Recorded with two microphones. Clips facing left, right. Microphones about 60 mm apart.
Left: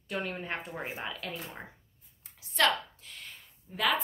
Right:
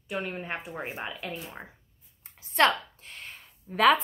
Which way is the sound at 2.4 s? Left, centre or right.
Right.